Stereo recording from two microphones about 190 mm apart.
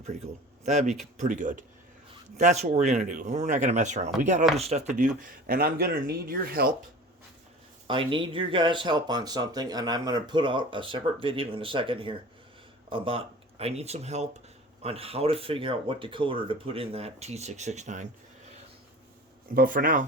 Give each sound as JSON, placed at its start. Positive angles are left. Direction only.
{"t": 0.6, "sound": "speech", "side_deg": -35}
{"t": 7.9, "sound": "speech", "side_deg": -25}
{"t": 19.5, "sound": "speech", "side_deg": -45}